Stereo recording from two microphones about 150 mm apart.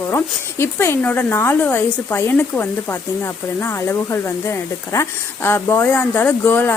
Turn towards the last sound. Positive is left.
turn(degrees=15)  # may be behind; listen again after turning